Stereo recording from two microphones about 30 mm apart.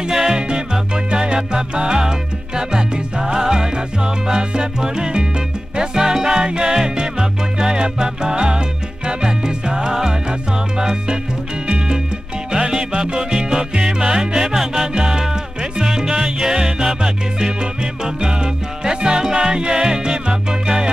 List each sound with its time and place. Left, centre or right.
0.1 s music: centre
0.4 s music: right
12.5 s music: right